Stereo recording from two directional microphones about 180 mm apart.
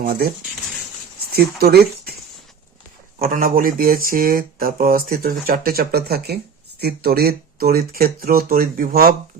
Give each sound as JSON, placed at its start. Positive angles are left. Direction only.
{"t": 0.0, "sound": "speech", "side_deg": -60}
{"t": 1.3, "sound": "speech", "side_deg": -60}
{"t": 3.2, "sound": "speech", "side_deg": -55}